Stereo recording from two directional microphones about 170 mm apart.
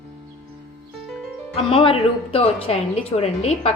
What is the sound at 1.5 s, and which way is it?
A woman's voice, 35° left (ahead or behind).